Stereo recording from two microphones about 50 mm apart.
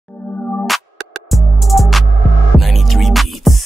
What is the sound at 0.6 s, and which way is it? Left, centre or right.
Music, centre.